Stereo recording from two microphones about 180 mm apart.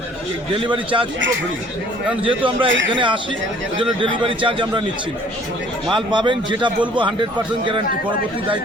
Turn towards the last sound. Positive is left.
turn(degrees=-25)  # may be behind; listen again after turning